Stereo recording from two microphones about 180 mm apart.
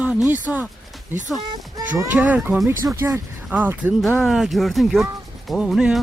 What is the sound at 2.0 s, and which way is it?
Speech, 10° right (ahead or behind).